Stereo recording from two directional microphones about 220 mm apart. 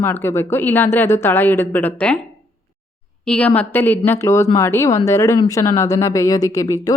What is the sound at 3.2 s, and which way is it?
A woman's voice, 5° left (ahead or behind).